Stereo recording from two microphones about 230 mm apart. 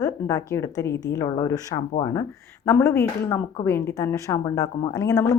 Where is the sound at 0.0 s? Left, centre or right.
Centre.